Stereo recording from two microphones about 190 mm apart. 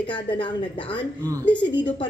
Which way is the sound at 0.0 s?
25° left (ahead or behind).